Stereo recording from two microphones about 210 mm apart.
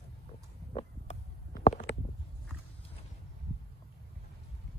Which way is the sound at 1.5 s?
45° left (ahead or behind).